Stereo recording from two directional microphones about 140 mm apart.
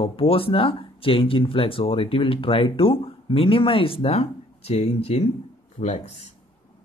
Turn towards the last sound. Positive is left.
turn(degrees=50)  # may be behind; listen again after turning